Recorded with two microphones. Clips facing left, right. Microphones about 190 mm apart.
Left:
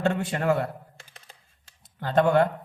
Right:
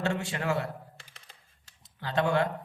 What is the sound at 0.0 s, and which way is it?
Speech, 50° left (ahead or behind).